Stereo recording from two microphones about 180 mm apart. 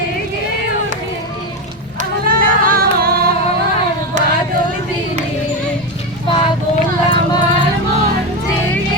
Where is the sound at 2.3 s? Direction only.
50° right (ahead or behind).